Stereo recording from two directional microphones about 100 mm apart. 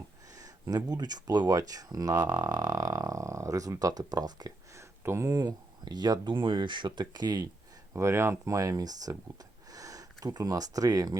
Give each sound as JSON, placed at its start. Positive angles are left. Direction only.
{"t": 0.3, "sound": "speech", "side_deg": -35}
{"t": 4.7, "sound": "speech", "side_deg": -30}
{"t": 6.3, "sound": "speech", "side_deg": -55}
{"t": 7.9, "sound": "speech", "side_deg": -25}